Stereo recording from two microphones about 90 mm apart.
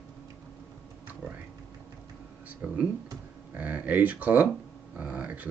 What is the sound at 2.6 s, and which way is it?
Speech, 20° right (ahead or behind).